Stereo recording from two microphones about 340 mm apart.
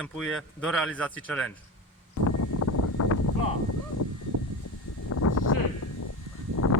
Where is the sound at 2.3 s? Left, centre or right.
Left.